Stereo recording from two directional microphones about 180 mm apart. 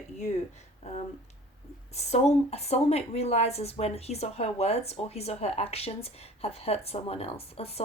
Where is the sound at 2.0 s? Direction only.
40° left (ahead or behind).